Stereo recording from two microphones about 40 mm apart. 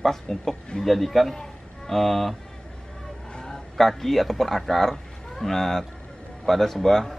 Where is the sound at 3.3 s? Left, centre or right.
Centre.